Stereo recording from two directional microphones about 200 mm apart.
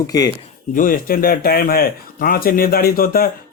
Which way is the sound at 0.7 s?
45° left (ahead or behind).